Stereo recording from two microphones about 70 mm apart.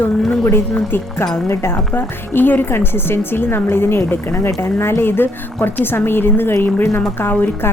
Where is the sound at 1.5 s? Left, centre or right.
Left.